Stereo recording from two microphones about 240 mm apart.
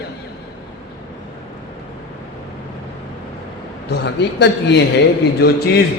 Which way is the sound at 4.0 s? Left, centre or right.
Left.